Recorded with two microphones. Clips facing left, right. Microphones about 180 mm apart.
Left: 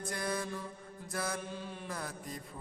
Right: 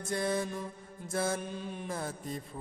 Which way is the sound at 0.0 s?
25° right (ahead or behind).